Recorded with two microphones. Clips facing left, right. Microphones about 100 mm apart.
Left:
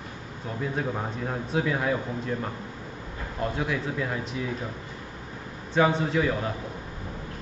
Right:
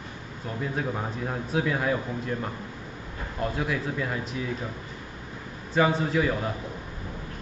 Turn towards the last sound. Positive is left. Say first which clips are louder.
# even
turn(degrees=0)  # may be behind; listen again after turning